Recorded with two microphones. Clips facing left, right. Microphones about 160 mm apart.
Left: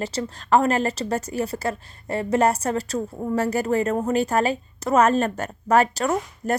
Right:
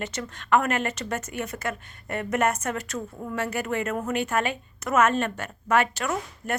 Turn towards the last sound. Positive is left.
turn(degrees=35)  # may be behind; listen again after turning